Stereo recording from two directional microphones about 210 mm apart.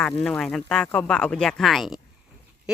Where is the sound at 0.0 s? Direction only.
5° left (ahead or behind).